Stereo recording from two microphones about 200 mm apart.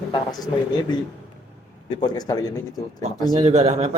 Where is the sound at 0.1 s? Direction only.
20° left (ahead or behind).